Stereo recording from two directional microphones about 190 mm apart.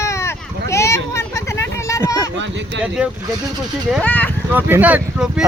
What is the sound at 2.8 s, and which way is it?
Speech, 5° right (ahead or behind).